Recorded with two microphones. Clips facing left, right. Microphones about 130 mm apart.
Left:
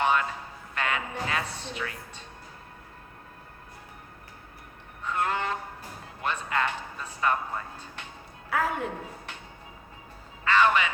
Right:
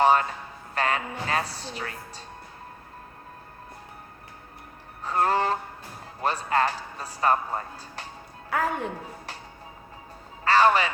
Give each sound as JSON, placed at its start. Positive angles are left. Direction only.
{"t": 0.0, "sound": "a sound", "side_deg": -35}
{"t": 0.7, "sound": "a man's voice", "side_deg": -35}
{"t": 5.0, "sound": "a sound", "side_deg": -35}
{"t": 6.2, "sound": "a man's voice", "side_deg": -35}
{"t": 8.4, "sound": "speech", "side_deg": 0}
{"t": 10.4, "sound": "a man's voice", "side_deg": -35}